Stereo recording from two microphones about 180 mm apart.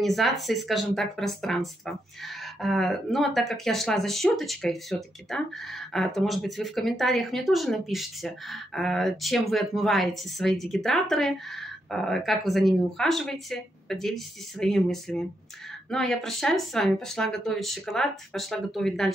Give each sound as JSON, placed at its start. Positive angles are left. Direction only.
{"t": 0.0, "sound": "speech", "side_deg": 0}